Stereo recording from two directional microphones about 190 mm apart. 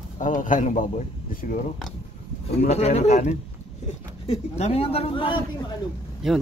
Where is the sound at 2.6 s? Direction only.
35° left (ahead or behind).